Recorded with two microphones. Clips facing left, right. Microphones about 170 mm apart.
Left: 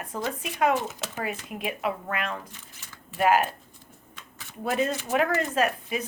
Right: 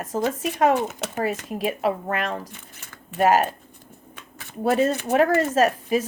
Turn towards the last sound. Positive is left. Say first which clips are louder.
# right 6 dB
turn(degrees=-40)  # may be behind; listen again after turning